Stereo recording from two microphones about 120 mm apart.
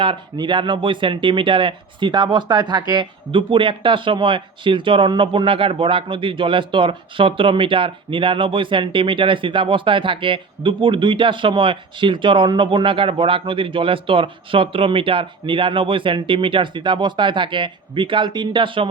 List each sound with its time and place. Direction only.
0.0 s speech: 45° right (ahead or behind)